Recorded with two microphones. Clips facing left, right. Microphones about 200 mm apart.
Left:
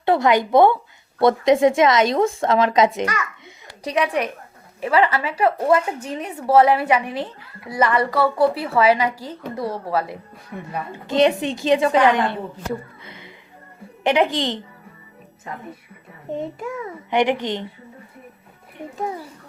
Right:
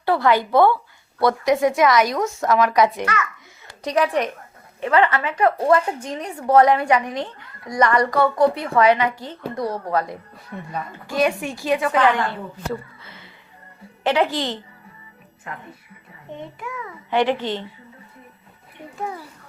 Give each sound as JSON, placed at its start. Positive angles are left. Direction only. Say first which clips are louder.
{"t": 0.0, "sound": "a woman's voice", "louder": "left 1 dB", "side_deg": 20}
{"t": 3.8, "sound": "a woman's voice", "louder": "right 1 dB", "side_deg": 0}
{"t": 11.0, "sound": "a woman's voice", "louder": "left 4 dB", "side_deg": 25}
{"t": 13.1, "sound": "music", "louder": "left 4 dB", "side_deg": 15}
{"t": 14.0, "sound": "speech", "louder": "left 2 dB", "side_deg": 20}
{"t": 16.6, "sound": "a child's voice", "louder": "left 4 dB", "side_deg": 30}
{"t": 17.1, "sound": "speech", "louder": "left 1 dB", "side_deg": 15}